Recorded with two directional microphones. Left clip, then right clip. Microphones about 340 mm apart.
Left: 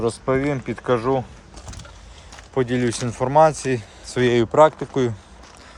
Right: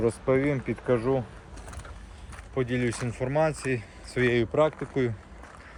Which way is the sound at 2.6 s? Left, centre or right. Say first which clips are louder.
Left 7 dB; left.